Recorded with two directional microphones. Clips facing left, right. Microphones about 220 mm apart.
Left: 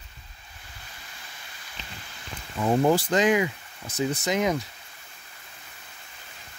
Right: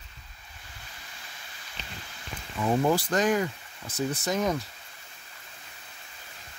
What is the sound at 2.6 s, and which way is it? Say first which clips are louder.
Speech: left 3 dB; 20° left (ahead or behind).